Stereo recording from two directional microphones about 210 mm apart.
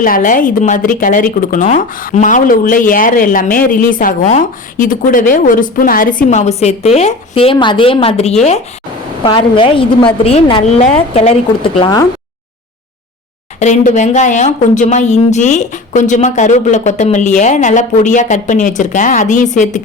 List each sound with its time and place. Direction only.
0.0 s a woman's voice: 40° left (ahead or behind); by 12.0 s 20° left (ahead or behind)
13.6 s speech: 35° left (ahead or behind)